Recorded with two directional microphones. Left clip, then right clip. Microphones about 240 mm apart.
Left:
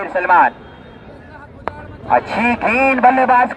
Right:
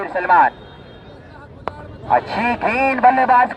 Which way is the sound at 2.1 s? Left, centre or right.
Centre.